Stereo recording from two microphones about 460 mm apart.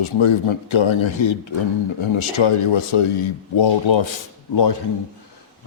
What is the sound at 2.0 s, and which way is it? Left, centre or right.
Speech, left.